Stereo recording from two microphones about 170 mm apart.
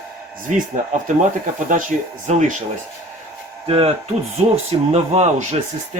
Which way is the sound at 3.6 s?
35° right (ahead or behind).